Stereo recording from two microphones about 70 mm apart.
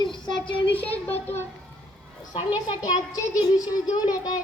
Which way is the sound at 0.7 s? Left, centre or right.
Left.